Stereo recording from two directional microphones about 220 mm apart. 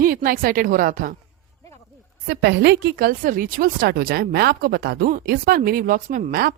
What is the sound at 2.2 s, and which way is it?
A woman's voice, 50° right (ahead or behind).